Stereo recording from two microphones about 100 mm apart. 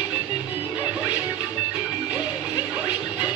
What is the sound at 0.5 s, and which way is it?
Music, 15° right (ahead or behind).